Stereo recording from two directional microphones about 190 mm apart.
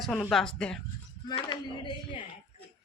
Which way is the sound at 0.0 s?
Centre (ahead or behind).